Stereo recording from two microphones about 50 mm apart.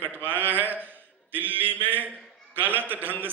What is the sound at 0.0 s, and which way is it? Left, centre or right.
Mantra, right.